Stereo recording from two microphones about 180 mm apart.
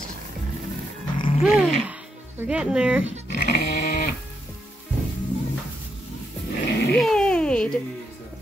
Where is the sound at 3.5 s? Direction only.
60° left (ahead or behind).